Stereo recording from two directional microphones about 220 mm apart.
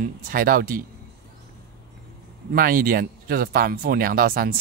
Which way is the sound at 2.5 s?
40° right (ahead or behind).